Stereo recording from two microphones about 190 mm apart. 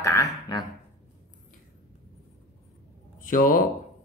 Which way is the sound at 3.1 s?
45° left (ahead or behind).